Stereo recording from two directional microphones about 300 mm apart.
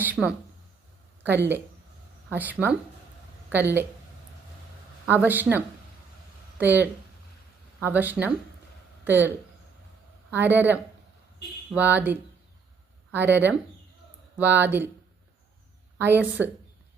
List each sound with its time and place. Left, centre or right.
0.0 s speech: centre
2.3 s speech: centre
5.0 s speech: centre
10.3 s speech: centre
16.0 s speech: centre